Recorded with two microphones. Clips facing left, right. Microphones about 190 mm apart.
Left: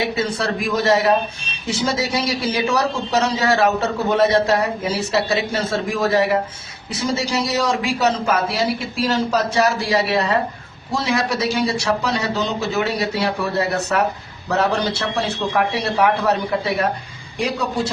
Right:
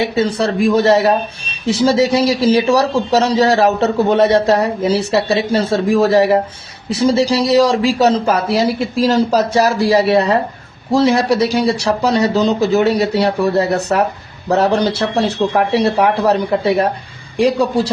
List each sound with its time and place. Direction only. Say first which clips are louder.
0.2 s a man's voice: right 7 dB; 30° right (ahead or behind)